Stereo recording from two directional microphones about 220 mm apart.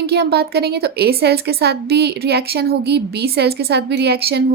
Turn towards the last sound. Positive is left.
turn(degrees=-45)  # may be behind; listen again after turning